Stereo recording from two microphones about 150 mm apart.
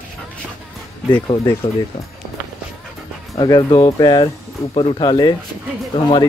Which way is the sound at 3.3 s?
30° left (ahead or behind).